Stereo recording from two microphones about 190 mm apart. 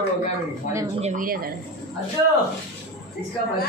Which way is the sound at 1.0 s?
45° right (ahead or behind).